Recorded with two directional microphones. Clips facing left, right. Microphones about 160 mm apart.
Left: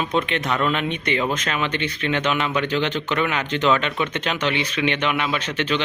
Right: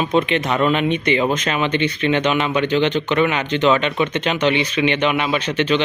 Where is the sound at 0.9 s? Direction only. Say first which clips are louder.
Right 6 dB; 90° right.